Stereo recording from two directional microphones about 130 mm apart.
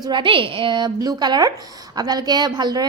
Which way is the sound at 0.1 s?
40° right (ahead or behind).